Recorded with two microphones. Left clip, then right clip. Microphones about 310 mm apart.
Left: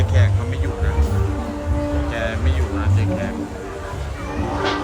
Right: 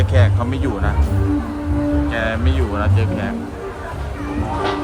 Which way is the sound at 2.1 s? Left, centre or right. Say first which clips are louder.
Right 4 dB; centre.